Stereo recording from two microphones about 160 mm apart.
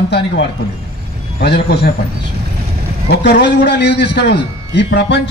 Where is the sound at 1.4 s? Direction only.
90° left.